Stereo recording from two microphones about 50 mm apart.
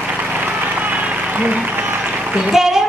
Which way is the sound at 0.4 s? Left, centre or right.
Right.